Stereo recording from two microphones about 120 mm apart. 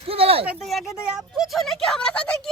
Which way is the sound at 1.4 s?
Centre (ahead or behind).